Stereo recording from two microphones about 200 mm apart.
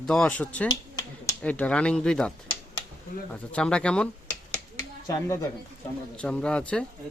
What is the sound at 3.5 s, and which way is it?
Speech, 5° left (ahead or behind).